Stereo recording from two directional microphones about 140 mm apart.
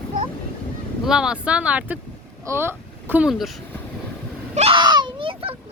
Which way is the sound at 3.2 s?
Centre (ahead or behind).